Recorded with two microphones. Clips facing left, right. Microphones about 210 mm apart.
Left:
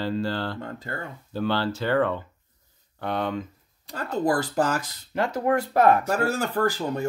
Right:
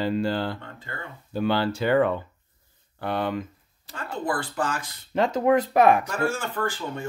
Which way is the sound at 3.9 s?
40° left (ahead or behind).